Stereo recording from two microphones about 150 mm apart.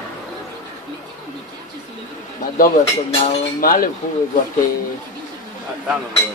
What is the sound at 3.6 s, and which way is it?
Speech, 70° left (ahead or behind).